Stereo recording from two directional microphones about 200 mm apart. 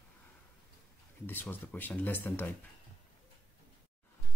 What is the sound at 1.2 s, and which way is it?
Speech, 10° left (ahead or behind).